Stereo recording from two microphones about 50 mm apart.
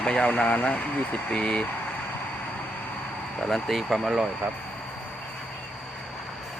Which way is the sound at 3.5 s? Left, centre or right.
Centre.